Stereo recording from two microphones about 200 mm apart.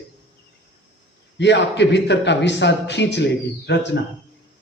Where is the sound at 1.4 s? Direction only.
60° left (ahead or behind).